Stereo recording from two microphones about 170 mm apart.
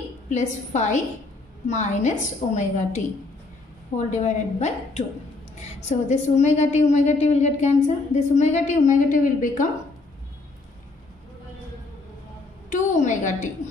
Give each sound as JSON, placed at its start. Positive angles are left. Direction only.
{"t": 0.3, "sound": "a woman's voice", "side_deg": 45}
{"t": 13.0, "sound": "a woman's voice", "side_deg": 45}